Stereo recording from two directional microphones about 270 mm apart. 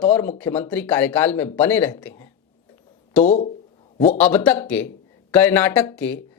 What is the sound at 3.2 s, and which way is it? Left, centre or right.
Speech, left.